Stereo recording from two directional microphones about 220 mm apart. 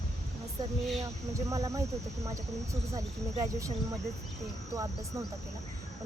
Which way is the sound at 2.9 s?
15° right (ahead or behind).